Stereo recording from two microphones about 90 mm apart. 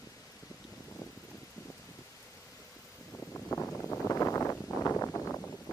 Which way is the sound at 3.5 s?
35° left (ahead or behind).